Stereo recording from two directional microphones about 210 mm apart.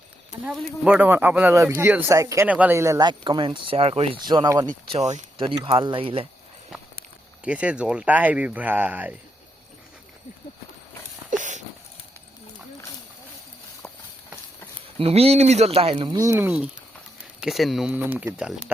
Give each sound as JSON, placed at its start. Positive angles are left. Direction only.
{"t": 0.4, "sound": "speech", "side_deg": -5}
{"t": 4.9, "sound": "speech", "side_deg": -30}
{"t": 7.4, "sound": "speech", "side_deg": -5}
{"t": 11.3, "sound": "dog", "side_deg": -35}
{"t": 13.8, "sound": "clip-clop", "side_deg": 5}
{"t": 14.8, "sound": "speech", "side_deg": -25}
{"t": 16.2, "sound": "speech", "side_deg": -10}